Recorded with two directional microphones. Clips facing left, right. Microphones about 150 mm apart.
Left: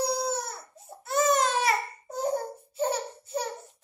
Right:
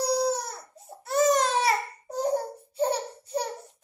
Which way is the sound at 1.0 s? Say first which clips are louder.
Right 2 dB; 35° right (ahead or behind).